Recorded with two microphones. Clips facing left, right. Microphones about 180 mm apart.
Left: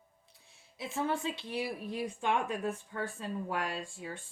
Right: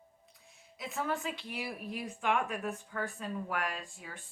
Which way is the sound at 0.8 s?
30° left (ahead or behind).